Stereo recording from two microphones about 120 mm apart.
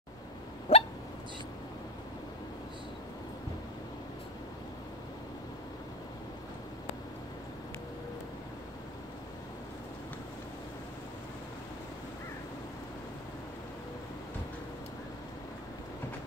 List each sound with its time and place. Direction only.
0.7 s hiccup: 75° left (ahead or behind)